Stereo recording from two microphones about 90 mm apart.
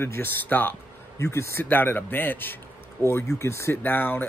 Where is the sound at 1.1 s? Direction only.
35° left (ahead or behind).